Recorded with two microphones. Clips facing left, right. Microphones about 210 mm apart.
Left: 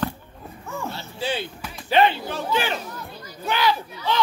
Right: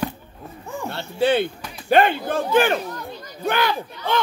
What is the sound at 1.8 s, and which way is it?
Speech, 50° right (ahead or behind).